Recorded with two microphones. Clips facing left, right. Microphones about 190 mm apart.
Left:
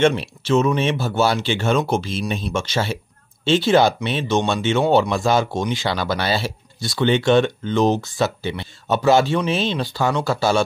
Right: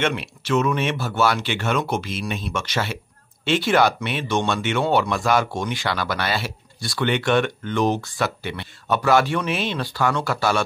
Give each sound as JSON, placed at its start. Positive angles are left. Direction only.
{"t": 0.0, "sound": "speech", "side_deg": 30}